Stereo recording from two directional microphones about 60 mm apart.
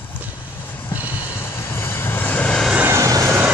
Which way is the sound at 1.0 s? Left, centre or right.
Right.